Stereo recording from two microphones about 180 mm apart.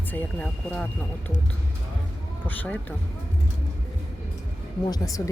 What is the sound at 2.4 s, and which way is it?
Speech, 10° left (ahead or behind).